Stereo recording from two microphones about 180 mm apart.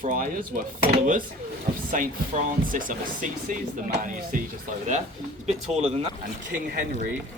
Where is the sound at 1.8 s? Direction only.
45° right (ahead or behind).